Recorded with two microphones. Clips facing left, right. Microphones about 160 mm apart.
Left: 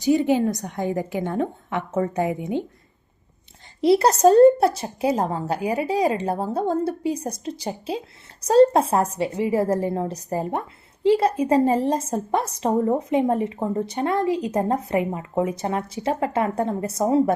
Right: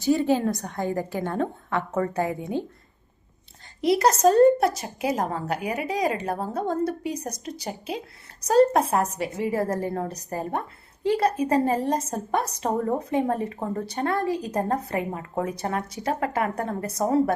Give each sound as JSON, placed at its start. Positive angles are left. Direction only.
{"t": 0.0, "sound": "a woman's voice", "side_deg": 15}
{"t": 3.8, "sound": "a woman's voice", "side_deg": 30}